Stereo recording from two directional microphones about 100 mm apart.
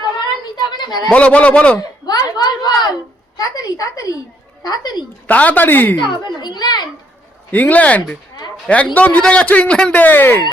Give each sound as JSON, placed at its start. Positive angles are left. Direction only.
{"t": 0.5, "sound": "a sound", "side_deg": 45}
{"t": 1.1, "sound": "a man's voice", "side_deg": 15}
{"t": 2.0, "sound": "a sound", "side_deg": 40}
{"t": 3.3, "sound": "a woman's voice", "side_deg": 35}
{"t": 5.3, "sound": "a man's voice", "side_deg": 15}
{"t": 6.0, "sound": "a child's voice", "side_deg": 50}
{"t": 7.5, "sound": "a man's voice", "side_deg": 15}